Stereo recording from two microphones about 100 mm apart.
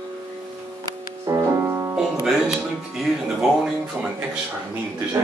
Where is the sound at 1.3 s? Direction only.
30° right (ahead or behind).